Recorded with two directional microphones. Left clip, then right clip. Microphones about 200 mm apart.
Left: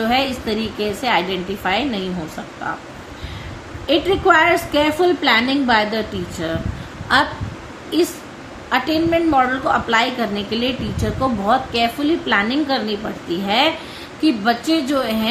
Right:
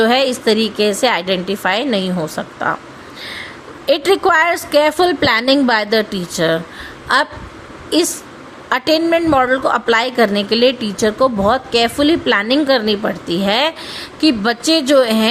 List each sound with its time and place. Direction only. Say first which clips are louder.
0.0 s a woman's voice: right 6 dB; 55° right (ahead or behind)
3.8 s a woman's voice: right 2 dB; 60° right (ahead or behind)
8.7 s a woman's voice: right 4 dB; 50° right (ahead or behind)